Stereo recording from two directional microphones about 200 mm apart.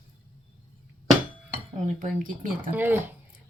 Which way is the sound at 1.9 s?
40° right (ahead or behind).